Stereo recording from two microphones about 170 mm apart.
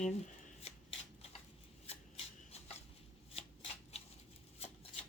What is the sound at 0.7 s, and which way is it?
Shuffling cards, 40° left (ahead or behind).